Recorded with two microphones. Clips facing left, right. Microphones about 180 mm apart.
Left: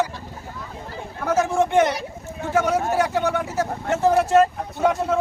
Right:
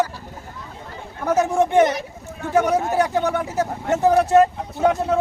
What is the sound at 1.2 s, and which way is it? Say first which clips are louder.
Speech: right 2 dB; 20° right (ahead or behind).